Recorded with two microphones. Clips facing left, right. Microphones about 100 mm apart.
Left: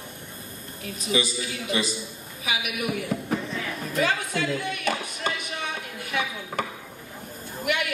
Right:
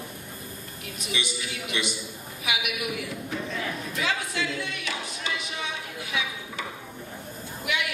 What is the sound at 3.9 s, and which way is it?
Music, 50° left (ahead or behind).